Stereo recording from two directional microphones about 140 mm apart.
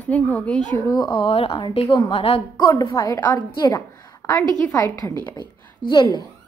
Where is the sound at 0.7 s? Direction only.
25° left (ahead or behind); by 2.6 s 45° left (ahead or behind).